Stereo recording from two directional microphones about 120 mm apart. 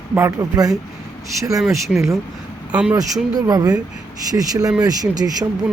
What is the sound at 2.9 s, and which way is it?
Speech, 30° right (ahead or behind).